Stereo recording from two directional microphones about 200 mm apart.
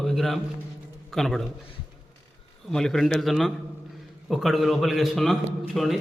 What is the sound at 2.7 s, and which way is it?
A man's voice, 5° left (ahead or behind).